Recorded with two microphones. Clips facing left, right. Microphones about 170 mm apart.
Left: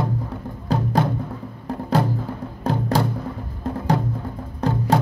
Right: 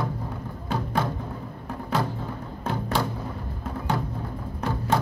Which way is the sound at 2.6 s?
35° left (ahead or behind).